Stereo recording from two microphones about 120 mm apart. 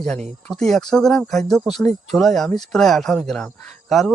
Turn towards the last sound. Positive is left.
turn(degrees=5)  # may be behind; listen again after turning